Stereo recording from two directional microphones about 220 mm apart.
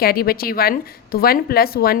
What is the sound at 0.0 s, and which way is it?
A woman's voice, 45° left (ahead or behind).